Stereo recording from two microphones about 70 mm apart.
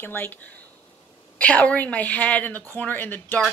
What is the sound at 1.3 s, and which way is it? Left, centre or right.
Speech, centre.